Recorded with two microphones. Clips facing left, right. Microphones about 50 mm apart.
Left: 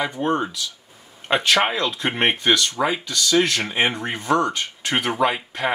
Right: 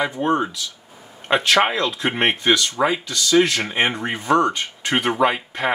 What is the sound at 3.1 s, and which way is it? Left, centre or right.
Speech, right.